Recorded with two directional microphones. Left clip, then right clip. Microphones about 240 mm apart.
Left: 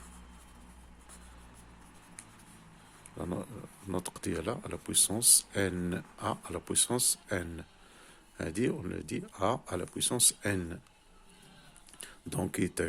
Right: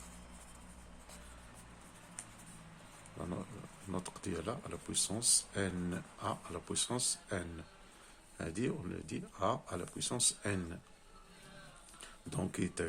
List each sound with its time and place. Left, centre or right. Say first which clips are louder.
3.9 s speech: left 6 dB; left
11.9 s speech: left 5 dB; left